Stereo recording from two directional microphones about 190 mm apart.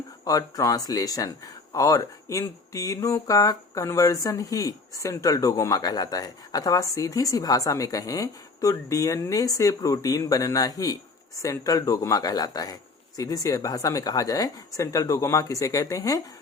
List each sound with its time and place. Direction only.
0.3 s speech: 20° left (ahead or behind)